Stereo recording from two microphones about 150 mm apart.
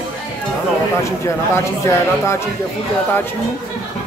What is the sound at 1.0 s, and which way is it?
Speech, 20° left (ahead or behind).